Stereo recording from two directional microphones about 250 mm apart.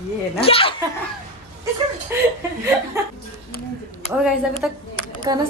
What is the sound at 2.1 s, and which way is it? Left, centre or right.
Speech, centre.